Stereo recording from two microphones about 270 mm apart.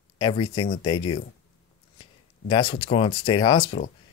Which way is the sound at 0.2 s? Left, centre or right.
Centre.